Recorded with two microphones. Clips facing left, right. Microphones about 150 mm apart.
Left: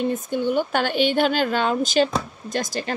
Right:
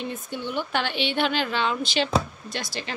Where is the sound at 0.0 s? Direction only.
45° left (ahead or behind).